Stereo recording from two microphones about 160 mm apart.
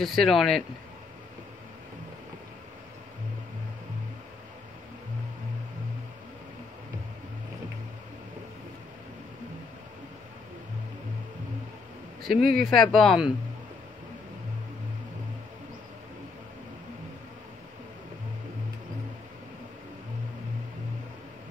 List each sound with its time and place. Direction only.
0.0 s speech: centre (ahead or behind)
12.3 s speech: 70° right (ahead or behind)
12.6 s speech: centre (ahead or behind)